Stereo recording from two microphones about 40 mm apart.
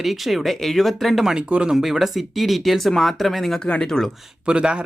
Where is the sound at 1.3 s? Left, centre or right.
Right.